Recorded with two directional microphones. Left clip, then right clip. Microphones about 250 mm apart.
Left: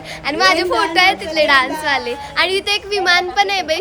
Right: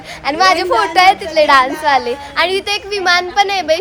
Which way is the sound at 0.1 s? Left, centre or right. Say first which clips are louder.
Right 2 dB; centre.